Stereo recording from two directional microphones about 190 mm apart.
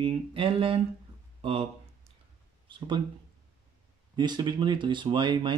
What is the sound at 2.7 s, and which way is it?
Speech, 25° right (ahead or behind).